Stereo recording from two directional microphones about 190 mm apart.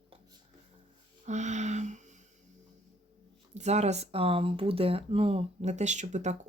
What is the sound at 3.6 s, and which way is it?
Speech, 35° right (ahead or behind).